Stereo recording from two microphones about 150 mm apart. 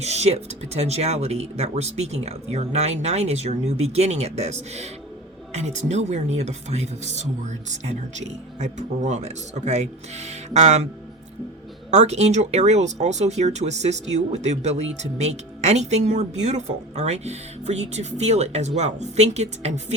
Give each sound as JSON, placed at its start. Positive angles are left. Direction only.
{"t": 0.0, "sound": "speech", "side_deg": -45}
{"t": 11.9, "sound": "speech", "side_deg": -50}